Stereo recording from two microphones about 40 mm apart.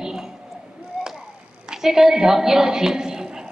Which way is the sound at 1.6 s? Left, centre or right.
Centre.